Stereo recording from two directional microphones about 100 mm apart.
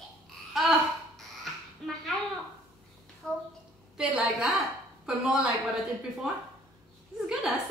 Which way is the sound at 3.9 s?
5° right (ahead or behind).